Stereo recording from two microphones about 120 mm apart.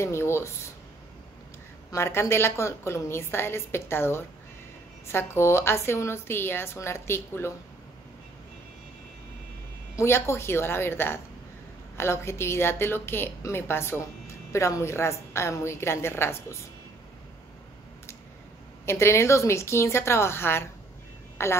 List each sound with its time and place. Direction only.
0.0 s a woman's voice: 20° left (ahead or behind)
1.9 s a woman's voice: 20° left (ahead or behind)
9.9 s a woman's voice: 20° left (ahead or behind)
18.9 s a woman's voice: 20° left (ahead or behind)